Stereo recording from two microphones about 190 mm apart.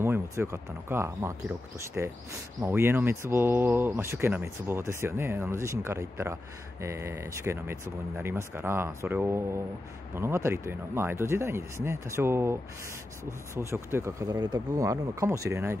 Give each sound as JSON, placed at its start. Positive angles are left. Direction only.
{"t": 0.0, "sound": "speech", "side_deg": -15}